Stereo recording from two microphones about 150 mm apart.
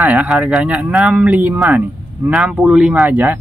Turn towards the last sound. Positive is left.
turn(degrees=-15)  # may be behind; listen again after turning